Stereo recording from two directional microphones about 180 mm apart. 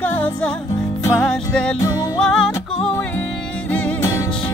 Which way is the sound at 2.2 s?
5° left (ahead or behind).